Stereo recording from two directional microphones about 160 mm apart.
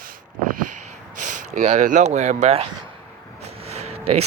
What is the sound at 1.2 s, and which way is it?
Speech, 45° right (ahead or behind).